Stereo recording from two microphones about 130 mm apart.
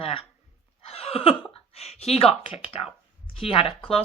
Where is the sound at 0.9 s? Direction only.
50° left (ahead or behind).